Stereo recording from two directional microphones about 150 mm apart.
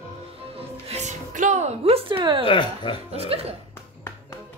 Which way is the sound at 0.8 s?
50° right (ahead or behind).